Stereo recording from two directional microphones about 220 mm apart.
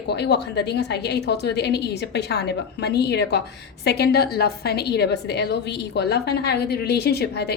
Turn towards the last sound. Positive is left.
turn(degrees=45)  # may be behind; listen again after turning